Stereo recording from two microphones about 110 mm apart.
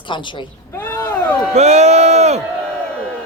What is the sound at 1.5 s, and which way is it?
Speech, 90° right.